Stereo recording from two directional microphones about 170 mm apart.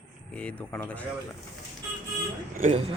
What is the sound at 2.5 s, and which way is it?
Speech, 45° right (ahead or behind).